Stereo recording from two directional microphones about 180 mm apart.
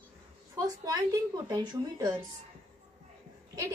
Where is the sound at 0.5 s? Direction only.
20° right (ahead or behind).